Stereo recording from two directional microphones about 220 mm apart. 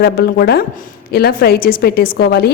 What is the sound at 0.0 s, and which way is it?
A woman's voice, 45° left (ahead or behind).